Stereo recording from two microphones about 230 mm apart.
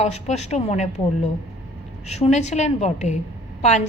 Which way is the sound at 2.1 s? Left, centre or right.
Left.